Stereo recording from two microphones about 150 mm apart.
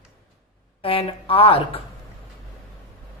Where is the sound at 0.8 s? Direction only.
40° left (ahead or behind).